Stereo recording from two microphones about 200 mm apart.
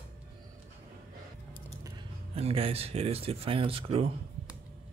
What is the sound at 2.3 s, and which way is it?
Speech, 30° right (ahead or behind).